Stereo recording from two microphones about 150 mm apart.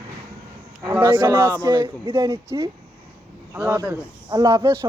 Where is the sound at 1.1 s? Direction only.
20° right (ahead or behind).